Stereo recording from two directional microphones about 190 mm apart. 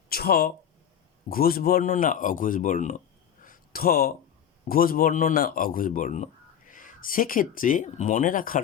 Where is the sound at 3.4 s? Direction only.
50° left (ahead or behind).